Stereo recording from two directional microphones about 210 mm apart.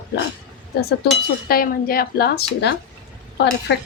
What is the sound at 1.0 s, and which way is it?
Speech, 45° left (ahead or behind).